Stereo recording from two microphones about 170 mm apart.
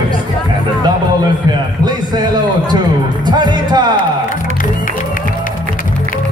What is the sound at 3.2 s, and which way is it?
Music, 25° right (ahead or behind).